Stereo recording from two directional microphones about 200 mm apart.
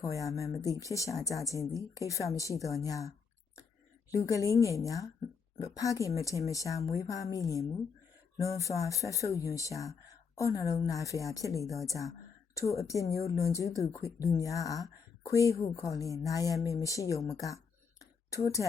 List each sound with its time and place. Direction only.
0.0 s speech: 15° left (ahead or behind)
4.1 s speech: 15° left (ahead or behind)
11.6 s a woman's voice: centre (ahead or behind)
11.9 s a woman's voice: 15° left (ahead or behind)